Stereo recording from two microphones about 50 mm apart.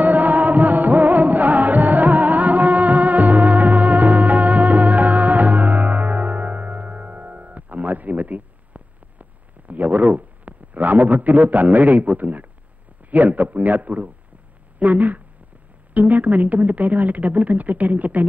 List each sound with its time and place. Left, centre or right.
0.0 s music: right
13.1 s speech: right